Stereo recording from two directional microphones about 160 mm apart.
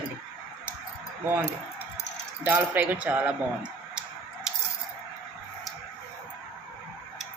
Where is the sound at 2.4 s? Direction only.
10° right (ahead or behind).